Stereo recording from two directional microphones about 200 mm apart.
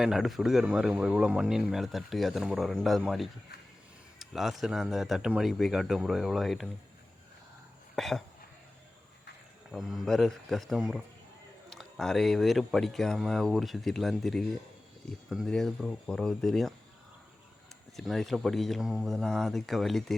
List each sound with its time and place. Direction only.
0.0 s speech: centre (ahead or behind)
7.9 s speech: centre (ahead or behind)
9.7 s speech: centre (ahead or behind)
17.9 s speech: centre (ahead or behind)